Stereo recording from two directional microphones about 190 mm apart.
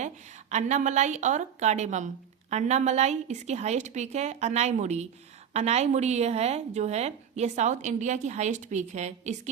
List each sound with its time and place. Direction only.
0.5 s a woman's voice: 40° right (ahead or behind)